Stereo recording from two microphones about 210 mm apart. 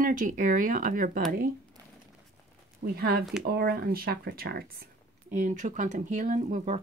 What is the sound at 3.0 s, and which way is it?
Speech, 45° right (ahead or behind).